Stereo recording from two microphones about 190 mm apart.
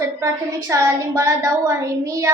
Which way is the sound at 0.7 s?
15° right (ahead or behind).